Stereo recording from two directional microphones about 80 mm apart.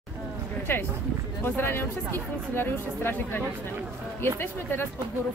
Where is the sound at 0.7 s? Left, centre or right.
Left.